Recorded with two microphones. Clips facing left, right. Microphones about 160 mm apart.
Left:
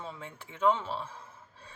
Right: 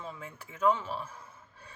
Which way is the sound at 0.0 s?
30° left (ahead or behind).